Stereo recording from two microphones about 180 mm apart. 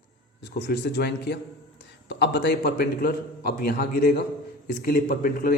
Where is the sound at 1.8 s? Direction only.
80° left.